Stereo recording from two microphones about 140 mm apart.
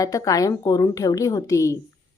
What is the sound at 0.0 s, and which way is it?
A woman's voice, 25° left (ahead or behind).